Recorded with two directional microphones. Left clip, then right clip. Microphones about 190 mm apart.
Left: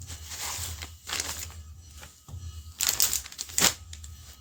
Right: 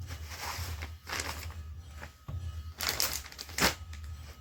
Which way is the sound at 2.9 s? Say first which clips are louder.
Left 4 dB; 15° right (ahead or behind).